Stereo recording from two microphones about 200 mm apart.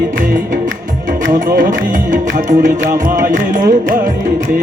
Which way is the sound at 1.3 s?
45° right (ahead or behind).